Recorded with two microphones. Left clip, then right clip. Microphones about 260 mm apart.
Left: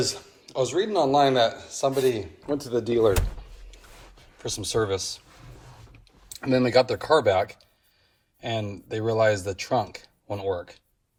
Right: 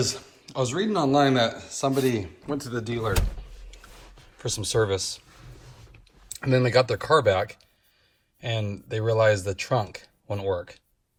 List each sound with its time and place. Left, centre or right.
0.0 s a man's voice: centre
3.7 s a sound: centre
4.4 s a man's voice: centre
6.2 s a man's voice: centre